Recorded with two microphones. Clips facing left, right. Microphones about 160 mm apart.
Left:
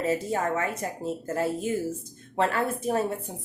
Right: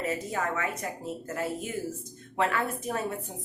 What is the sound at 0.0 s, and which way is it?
Speech, 30° left (ahead or behind).